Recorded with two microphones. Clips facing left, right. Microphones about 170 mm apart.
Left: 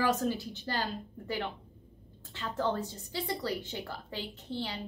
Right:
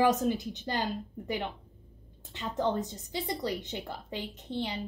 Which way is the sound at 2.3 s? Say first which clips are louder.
Right 2 dB; 20° right (ahead or behind).